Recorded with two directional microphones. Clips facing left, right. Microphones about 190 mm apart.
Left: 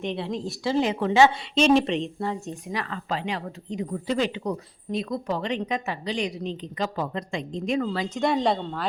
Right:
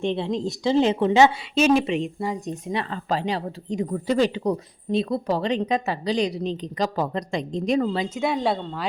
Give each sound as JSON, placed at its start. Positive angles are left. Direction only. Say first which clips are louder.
{"t": 0.0, "sound": "a woman's voice", "louder": "right 5 dB", "side_deg": -25}
{"t": 1.5, "sound": "speech", "louder": "even", "side_deg": -5}
{"t": 3.1, "sound": "speech", "louder": "right 5 dB", "side_deg": -35}
{"t": 8.1, "sound": "speech", "louder": "even", "side_deg": -5}